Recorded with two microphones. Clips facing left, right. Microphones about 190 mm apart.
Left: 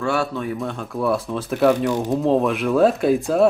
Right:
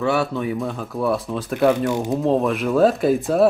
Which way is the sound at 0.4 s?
Centre (ahead or behind).